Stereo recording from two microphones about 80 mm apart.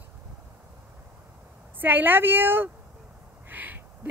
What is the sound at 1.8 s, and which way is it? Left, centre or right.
Speech, right.